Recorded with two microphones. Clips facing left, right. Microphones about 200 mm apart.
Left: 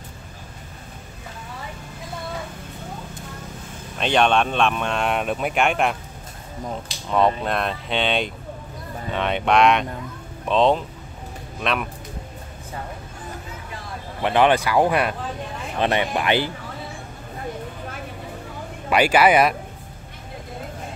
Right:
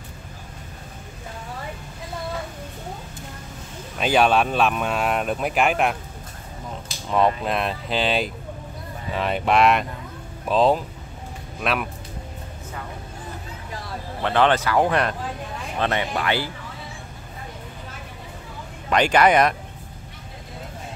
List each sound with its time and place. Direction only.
4.0 s speech: 5° right (ahead or behind)
7.4 s speech: centre (ahead or behind)
14.2 s speech: 15° left (ahead or behind)
18.9 s speech: 10° left (ahead or behind)